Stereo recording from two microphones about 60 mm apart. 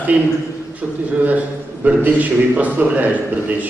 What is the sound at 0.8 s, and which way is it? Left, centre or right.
A man's voice, centre.